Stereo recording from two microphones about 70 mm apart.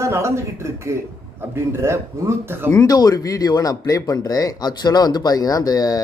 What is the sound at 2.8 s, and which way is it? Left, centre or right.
Speech, left.